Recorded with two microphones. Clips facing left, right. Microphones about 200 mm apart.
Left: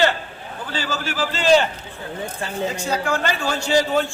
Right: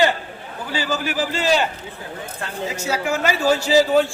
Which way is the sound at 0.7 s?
15° right (ahead or behind).